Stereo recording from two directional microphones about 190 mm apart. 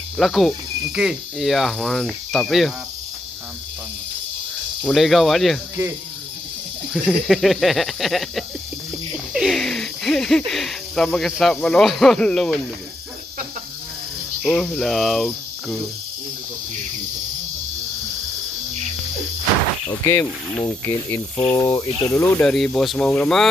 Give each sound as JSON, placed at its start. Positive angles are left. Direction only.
{"t": 0.2, "sound": "cricket", "side_deg": 0}
{"t": 4.8, "sound": "cricket", "side_deg": 0}
{"t": 6.9, "sound": "cricket", "side_deg": 0}
{"t": 9.1, "sound": "speech", "side_deg": 0}
{"t": 14.4, "sound": "cricket", "side_deg": 0}
{"t": 19.9, "sound": "speech", "side_deg": 10}
{"t": 22.4, "sound": "cricket", "side_deg": 5}